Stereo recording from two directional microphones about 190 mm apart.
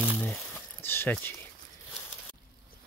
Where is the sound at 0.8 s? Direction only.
10° left (ahead or behind).